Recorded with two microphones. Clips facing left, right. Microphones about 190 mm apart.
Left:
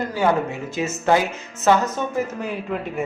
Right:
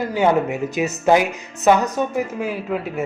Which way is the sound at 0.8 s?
15° right (ahead or behind).